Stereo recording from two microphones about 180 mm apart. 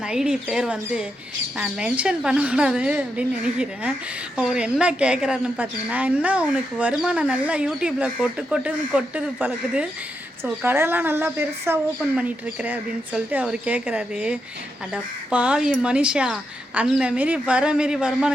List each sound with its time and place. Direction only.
0.1 s a woman's voice: 5° right (ahead or behind)